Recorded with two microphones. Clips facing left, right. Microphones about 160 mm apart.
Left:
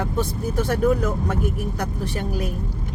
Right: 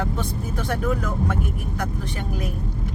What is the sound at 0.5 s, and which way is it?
Speech, 40° left (ahead or behind).